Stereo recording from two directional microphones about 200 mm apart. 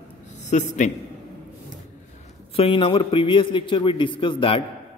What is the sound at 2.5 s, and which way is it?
A man's voice, 25° left (ahead or behind).